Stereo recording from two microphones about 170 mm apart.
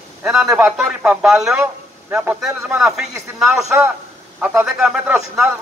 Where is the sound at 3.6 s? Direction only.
15° right (ahead or behind).